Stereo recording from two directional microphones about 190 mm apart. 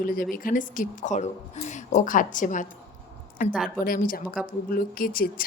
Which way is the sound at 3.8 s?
45° left (ahead or behind).